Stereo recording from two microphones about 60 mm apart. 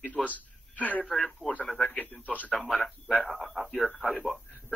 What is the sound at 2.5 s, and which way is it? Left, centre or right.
Speech, centre.